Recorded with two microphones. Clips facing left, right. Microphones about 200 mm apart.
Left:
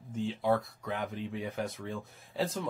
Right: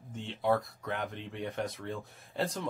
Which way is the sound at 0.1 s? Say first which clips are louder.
Left 1 dB; centre (ahead or behind).